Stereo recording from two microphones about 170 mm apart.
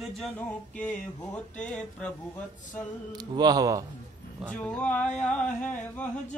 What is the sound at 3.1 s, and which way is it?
Speech, 25° right (ahead or behind).